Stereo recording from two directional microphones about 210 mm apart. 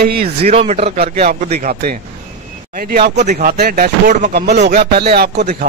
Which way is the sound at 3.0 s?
35° right (ahead or behind).